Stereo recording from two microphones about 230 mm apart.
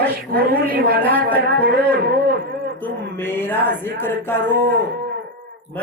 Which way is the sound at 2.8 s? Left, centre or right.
Centre.